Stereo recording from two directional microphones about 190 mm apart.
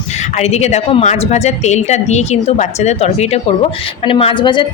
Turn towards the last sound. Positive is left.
turn(degrees=25)  # may be behind; listen again after turning